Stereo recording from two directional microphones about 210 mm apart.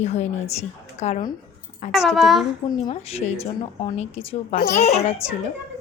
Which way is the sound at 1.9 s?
Centre (ahead or behind).